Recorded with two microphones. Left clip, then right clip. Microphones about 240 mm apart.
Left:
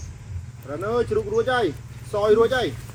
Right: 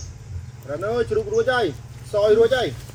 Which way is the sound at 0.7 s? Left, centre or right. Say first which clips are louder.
Right 1 dB; centre.